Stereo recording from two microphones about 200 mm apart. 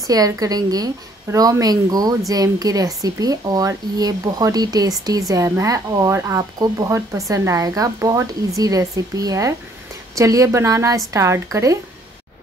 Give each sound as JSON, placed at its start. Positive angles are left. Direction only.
{"t": 0.0, "sound": "speech", "side_deg": -20}